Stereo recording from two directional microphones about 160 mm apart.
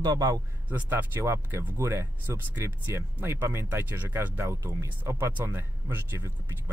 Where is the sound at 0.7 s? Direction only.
10° right (ahead or behind).